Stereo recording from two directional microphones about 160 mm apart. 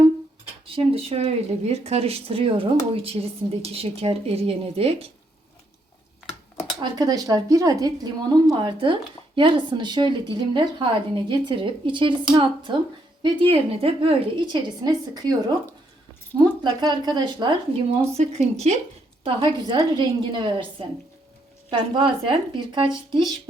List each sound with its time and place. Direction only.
0.6 s speech: 35° right (ahead or behind)
6.7 s speech: 25° right (ahead or behind)
16.6 s speech: 25° right (ahead or behind); by 18.8 s 45° right (ahead or behind)
19.2 s speech: 30° right (ahead or behind)